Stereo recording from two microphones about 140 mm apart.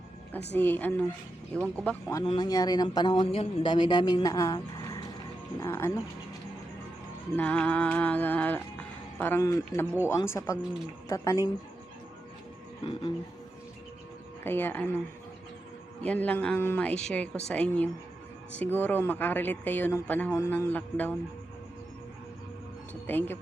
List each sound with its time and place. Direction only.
0.5 s speech: 15° left (ahead or behind)
2.2 s a man's voice: 35° left (ahead or behind); by 6.0 s 20° left (ahead or behind)
7.3 s a man's voice: 10° left (ahead or behind)
12.8 s speech: 40° left (ahead or behind)
14.4 s speech: 15° left (ahead or behind)
16.0 s speech: 10° left (ahead or behind)
23.0 s speech: 15° left (ahead or behind)